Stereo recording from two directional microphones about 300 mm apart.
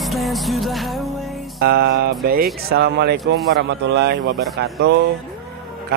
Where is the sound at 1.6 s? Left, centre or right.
Right.